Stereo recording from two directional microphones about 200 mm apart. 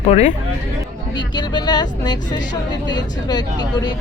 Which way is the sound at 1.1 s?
20° left (ahead or behind).